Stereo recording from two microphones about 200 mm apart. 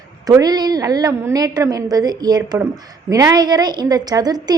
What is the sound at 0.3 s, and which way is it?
A woman's voice, 20° right (ahead or behind).